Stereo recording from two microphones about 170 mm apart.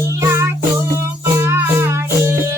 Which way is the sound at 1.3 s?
15° right (ahead or behind).